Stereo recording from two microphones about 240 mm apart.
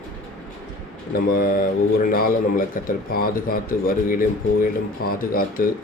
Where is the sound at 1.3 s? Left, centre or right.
Left.